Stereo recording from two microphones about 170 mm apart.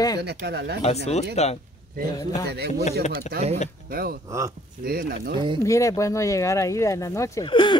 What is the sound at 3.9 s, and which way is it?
Speech, 60° right (ahead or behind).